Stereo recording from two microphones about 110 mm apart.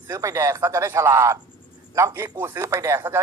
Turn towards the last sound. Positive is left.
turn(degrees=-25)  # may be behind; listen again after turning